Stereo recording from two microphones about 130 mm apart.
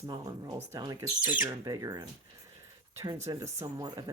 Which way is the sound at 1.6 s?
30° right (ahead or behind).